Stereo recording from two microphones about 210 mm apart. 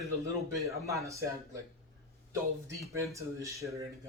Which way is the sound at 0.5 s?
15° right (ahead or behind).